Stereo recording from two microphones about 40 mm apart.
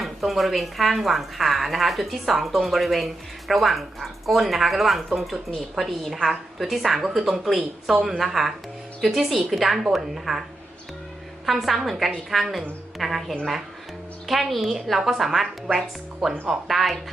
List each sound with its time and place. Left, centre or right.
0.0 s speech: centre
11.4 s speech: centre